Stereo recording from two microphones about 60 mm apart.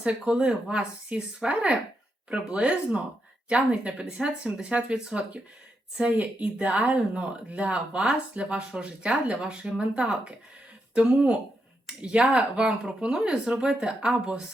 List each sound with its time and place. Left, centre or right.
0.0 s speech: centre